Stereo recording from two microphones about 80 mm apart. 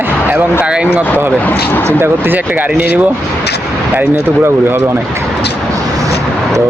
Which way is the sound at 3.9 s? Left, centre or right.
Right.